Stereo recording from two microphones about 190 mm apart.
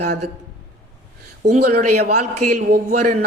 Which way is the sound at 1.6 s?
55° right (ahead or behind).